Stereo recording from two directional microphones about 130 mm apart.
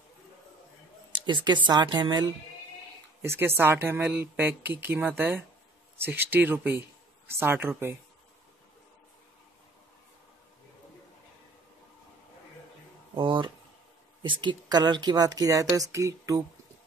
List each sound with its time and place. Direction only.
1.1 s speech: 35° right (ahead or behind)
3.2 s speech: 20° right (ahead or behind)
13.1 s a sound: 40° right (ahead or behind)
14.2 s speech: 40° right (ahead or behind); by 16.4 s 25° right (ahead or behind)